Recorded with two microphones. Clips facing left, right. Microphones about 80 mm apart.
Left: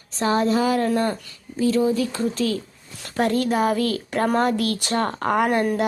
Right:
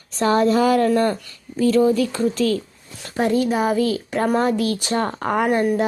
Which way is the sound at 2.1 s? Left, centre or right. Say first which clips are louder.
Right 4 dB; right.